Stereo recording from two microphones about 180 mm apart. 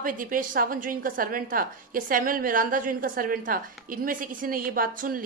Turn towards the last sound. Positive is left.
turn(degrees=-50)  # may be behind; listen again after turning